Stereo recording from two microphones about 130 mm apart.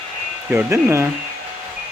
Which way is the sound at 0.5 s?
20° right (ahead or behind).